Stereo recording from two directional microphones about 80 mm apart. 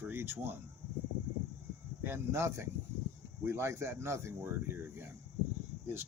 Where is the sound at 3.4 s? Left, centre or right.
Right.